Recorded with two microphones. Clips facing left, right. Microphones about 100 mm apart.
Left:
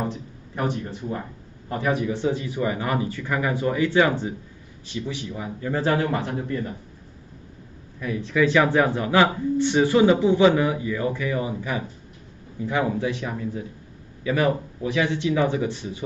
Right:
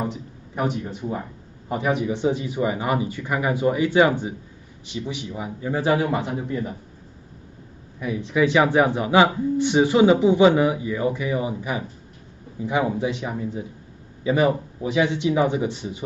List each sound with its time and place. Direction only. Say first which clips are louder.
0.0 s a sound: right 1 dB; 10° right (ahead or behind)
1.7 s speech: right 1 dB; 20° right (ahead or behind)
8.0 s speech: right 1 dB; 15° right (ahead or behind)